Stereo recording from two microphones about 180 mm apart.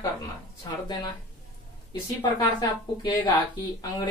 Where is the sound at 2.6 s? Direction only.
25° left (ahead or behind).